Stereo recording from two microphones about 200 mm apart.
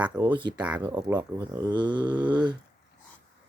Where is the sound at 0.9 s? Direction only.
20° right (ahead or behind).